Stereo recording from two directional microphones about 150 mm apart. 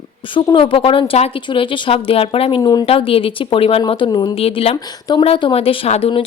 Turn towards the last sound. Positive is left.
turn(degrees=40)  # may be behind; listen again after turning